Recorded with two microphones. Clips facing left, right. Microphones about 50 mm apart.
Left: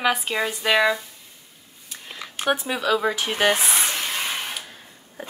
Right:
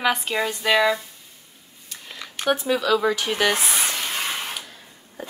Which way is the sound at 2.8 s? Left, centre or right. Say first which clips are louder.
Right 1 dB; centre.